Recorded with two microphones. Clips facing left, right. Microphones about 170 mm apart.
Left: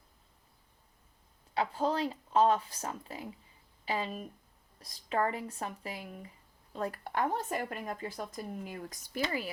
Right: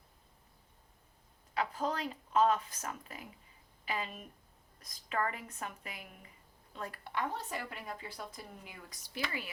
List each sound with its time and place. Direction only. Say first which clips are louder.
1.5 s speech: left 4 dB; 30° left (ahead or behind); by 9.2 s 50° left (ahead or behind)